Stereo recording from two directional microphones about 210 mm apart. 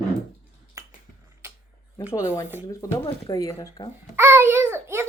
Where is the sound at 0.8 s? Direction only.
15° right (ahead or behind).